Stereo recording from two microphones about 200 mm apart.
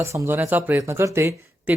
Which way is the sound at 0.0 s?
15° right (ahead or behind).